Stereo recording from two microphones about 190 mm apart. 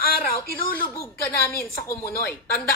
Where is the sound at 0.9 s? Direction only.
15° left (ahead or behind).